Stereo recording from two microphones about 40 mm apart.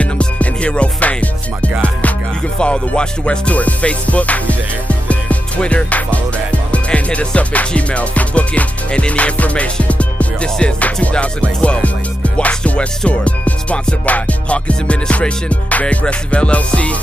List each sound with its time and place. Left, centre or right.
0.0 s music: left
2.6 s music: left